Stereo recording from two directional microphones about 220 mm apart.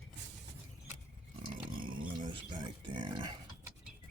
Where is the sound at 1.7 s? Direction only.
20° right (ahead or behind).